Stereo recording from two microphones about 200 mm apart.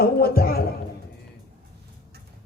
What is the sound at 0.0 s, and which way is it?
Music, 50° left (ahead or behind).